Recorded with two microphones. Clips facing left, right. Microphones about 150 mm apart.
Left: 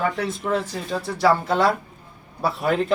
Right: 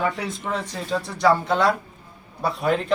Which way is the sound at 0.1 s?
Centre (ahead or behind).